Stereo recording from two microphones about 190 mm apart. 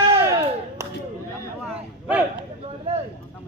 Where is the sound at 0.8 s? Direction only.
15° right (ahead or behind).